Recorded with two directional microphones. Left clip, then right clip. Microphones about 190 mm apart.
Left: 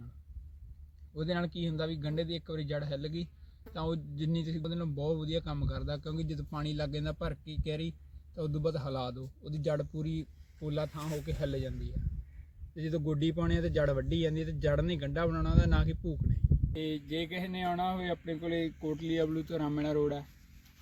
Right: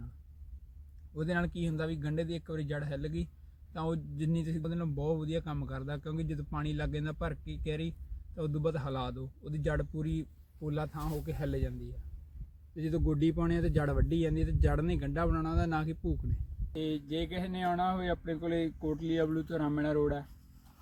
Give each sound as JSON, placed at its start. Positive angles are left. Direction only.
{"t": 1.1, "sound": "a man's voice", "side_deg": 0}
{"t": 12.7, "sound": "a man's voice", "side_deg": -25}
{"t": 16.7, "sound": "speech", "side_deg": 10}